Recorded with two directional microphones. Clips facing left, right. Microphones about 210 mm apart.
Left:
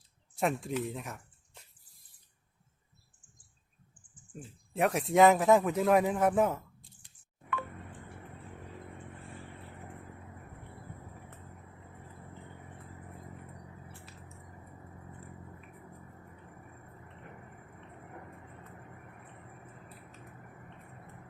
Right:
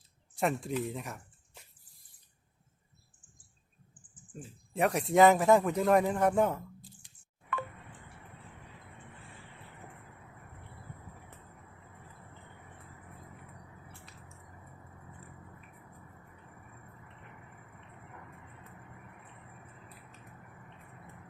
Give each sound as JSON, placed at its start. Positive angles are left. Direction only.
{"t": 0.3, "sound": "speech", "side_deg": 0}
{"t": 4.3, "sound": "speech", "side_deg": 0}